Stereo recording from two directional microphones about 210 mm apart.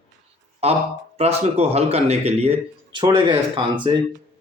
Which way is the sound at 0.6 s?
30° right (ahead or behind).